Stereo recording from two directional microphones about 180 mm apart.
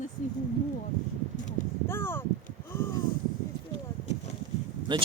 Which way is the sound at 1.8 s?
15° left (ahead or behind).